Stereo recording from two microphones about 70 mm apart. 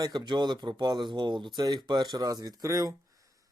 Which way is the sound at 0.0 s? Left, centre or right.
Right.